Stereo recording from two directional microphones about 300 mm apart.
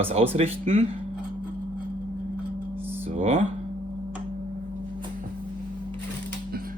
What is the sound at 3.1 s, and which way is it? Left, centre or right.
Speech, right.